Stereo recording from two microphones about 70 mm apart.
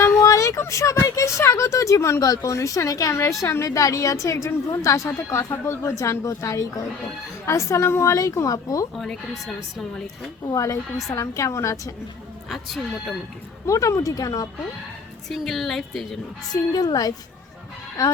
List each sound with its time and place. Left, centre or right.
0.0 s a sound: left
2.3 s a woman's voice: left
3.7 s a woman's voice: left
9.0 s a woman's voice: centre
10.4 s a woman's voice: left
12.5 s a woman's voice: centre
13.7 s a woman's voice: left
15.3 s a woman's voice: centre
16.5 s a woman's voice: left